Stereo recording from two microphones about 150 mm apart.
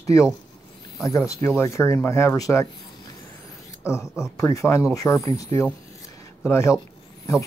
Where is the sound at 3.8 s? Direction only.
20° left (ahead or behind).